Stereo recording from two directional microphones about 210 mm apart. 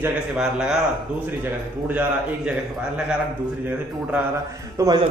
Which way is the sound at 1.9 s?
10° right (ahead or behind).